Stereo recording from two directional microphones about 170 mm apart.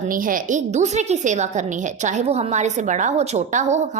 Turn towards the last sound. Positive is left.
turn(degrees=-45)  # may be behind; listen again after turning